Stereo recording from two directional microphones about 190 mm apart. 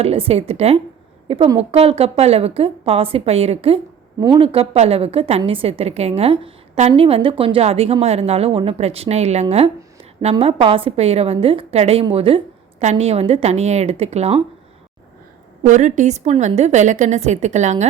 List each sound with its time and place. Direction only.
0.0 s a woman's voice: 30° right (ahead or behind)
15.6 s a woman's voice: 40° right (ahead or behind)